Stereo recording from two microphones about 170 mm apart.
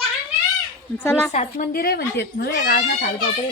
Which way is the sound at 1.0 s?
15° left (ahead or behind).